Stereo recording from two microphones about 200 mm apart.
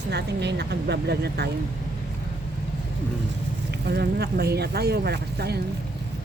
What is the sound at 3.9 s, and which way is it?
Speech, 55° right (ahead or behind).